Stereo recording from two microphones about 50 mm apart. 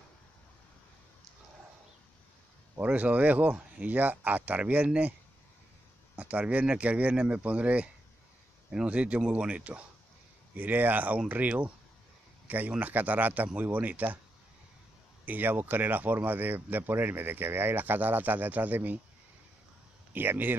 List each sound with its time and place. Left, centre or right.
2.8 s speech: right
6.1 s speech: right
12.4 s speech: right
15.2 s speech: right
20.2 s speech: right